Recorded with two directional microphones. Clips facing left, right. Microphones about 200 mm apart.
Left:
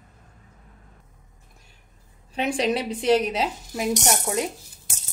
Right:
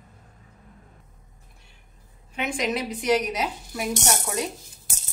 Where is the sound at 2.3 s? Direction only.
35° left (ahead or behind).